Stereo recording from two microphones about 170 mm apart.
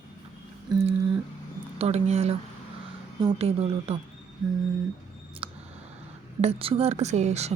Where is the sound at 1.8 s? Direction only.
40° right (ahead or behind).